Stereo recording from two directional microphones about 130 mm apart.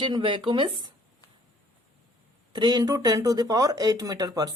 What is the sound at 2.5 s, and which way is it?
Speech, 35° right (ahead or behind).